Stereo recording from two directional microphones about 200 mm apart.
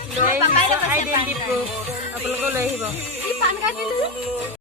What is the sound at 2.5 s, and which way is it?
Speech, 10° right (ahead or behind).